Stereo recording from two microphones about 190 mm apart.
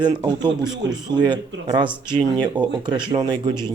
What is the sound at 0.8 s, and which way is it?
Speech, 70° right (ahead or behind).